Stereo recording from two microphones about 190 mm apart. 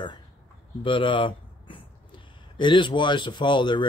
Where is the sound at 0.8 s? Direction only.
25° left (ahead or behind).